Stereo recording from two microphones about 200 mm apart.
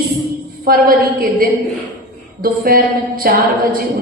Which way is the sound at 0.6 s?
45° right (ahead or behind).